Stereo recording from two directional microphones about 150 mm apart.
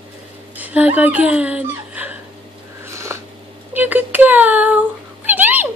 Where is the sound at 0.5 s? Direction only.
10° right (ahead or behind).